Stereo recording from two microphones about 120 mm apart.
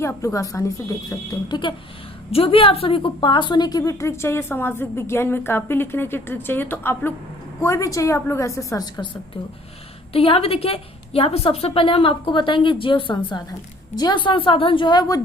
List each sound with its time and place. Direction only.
0.2 s a woman's voice: 25° left (ahead or behind)
1.5 s a woman's voice: 40° left (ahead or behind)
2.3 s a woman's voice: 50° left (ahead or behind); by 9.0 s 30° left (ahead or behind)
10.1 s a woman's voice: 55° left (ahead or behind); by 15.2 s 30° left (ahead or behind)